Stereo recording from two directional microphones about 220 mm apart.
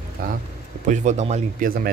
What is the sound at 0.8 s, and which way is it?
Speech, 30° right (ahead or behind).